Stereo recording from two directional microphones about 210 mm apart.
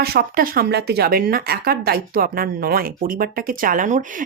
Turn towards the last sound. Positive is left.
turn(degrees=-40)  # may be behind; listen again after turning